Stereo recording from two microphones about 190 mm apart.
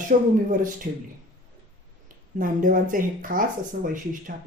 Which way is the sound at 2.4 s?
45° right (ahead or behind).